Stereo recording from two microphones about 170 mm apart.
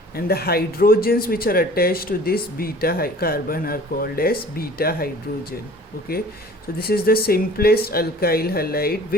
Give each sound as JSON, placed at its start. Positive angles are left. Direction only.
{"t": 0.3, "sound": "speech", "side_deg": 65}